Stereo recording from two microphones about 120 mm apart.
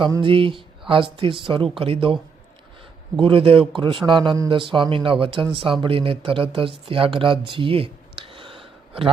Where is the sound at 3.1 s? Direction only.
45° right (ahead or behind).